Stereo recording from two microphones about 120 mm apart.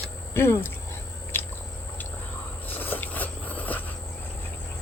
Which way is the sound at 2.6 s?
15° left (ahead or behind).